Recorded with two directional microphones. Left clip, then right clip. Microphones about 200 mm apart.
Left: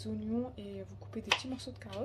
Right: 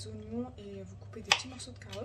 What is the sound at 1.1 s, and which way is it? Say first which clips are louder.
Speech: right 3 dB; 40° left (ahead or behind).